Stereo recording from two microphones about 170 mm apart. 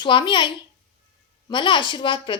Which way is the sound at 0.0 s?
25° left (ahead or behind).